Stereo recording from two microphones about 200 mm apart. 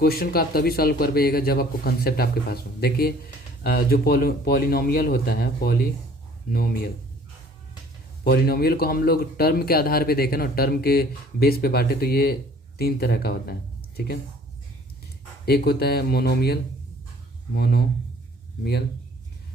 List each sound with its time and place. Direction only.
0.0 s speech: 50° left (ahead or behind)
8.2 s speech: 50° left (ahead or behind)
15.4 s speech: 50° left (ahead or behind)